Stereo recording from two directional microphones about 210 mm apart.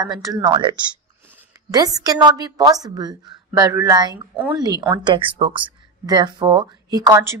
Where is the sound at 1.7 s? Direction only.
15° right (ahead or behind).